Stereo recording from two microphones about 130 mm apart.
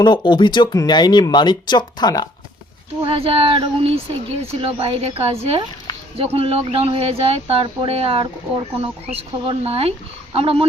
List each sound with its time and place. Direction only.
0.0 s speech: 35° left (ahead or behind)
3.0 s speech: 45° right (ahead or behind)